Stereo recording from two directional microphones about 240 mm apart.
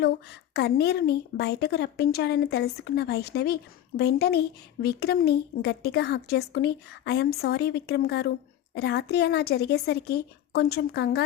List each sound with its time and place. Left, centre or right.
0.5 s a woman's voice: left